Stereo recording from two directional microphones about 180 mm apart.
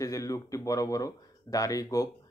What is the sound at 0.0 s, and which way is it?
Speech, 15° left (ahead or behind).